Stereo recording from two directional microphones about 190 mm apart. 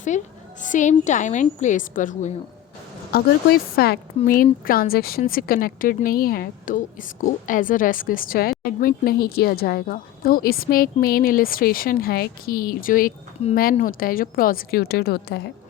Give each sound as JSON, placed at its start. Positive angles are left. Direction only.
{"t": 0.1, "sound": "a woman's voice", "side_deg": 40}
{"t": 3.1, "sound": "a woman's voice", "side_deg": 55}
{"t": 13.4, "sound": "a woman's voice", "side_deg": 35}
{"t": 13.8, "sound": "a woman's voice", "side_deg": 50}